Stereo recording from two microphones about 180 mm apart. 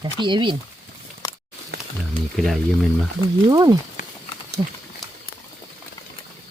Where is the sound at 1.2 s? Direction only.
20° left (ahead or behind).